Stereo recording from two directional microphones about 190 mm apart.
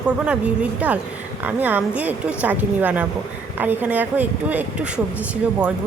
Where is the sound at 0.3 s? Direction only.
5° right (ahead or behind).